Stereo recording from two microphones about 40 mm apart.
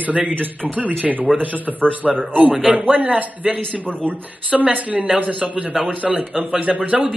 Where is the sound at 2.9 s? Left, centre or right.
Right.